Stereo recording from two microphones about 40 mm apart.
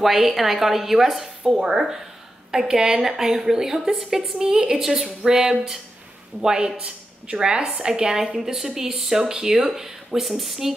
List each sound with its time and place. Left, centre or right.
0.0 s speech: centre
1.4 s speech: centre
4.4 s a woman's voice: centre
8.4 s speech: centre